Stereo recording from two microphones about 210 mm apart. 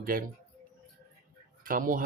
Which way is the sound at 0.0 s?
45° right (ahead or behind).